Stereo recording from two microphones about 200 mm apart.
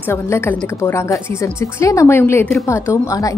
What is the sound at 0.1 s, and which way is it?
A woman's voice, 10° left (ahead or behind).